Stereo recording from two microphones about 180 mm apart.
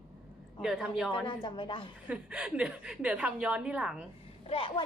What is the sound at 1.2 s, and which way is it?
Speech, 25° left (ahead or behind).